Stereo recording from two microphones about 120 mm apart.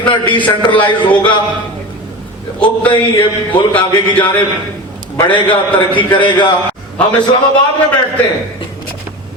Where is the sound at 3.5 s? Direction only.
40° left (ahead or behind).